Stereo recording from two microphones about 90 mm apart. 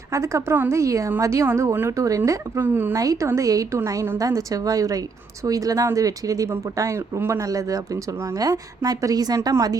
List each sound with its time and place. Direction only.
0.1 s speech: 35° right (ahead or behind)
0.8 s a woman's voice: 35° right (ahead or behind)
2.6 s a woman's voice: 25° right (ahead or behind)
2.9 s a woman's voice: 40° right (ahead or behind)